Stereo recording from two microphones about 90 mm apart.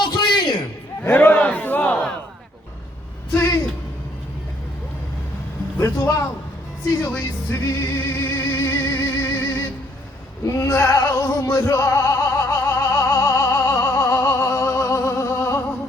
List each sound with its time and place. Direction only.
0.0 s a sound: 55° left (ahead or behind)
1.0 s battle cry: 20° left (ahead or behind)
3.3 s music: 30° left (ahead or behind)
7.0 s music: 30° left (ahead or behind)